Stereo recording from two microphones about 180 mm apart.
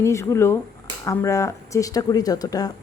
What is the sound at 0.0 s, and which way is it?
Speech, 15° left (ahead or behind).